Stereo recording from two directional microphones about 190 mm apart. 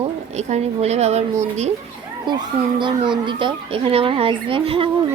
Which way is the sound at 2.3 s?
25° right (ahead or behind).